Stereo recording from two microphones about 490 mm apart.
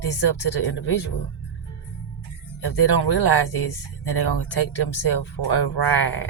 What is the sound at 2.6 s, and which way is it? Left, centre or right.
Speech, left.